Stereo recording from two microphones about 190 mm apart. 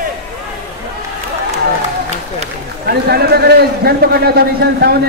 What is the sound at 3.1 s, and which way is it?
A man's voice, 55° right (ahead or behind).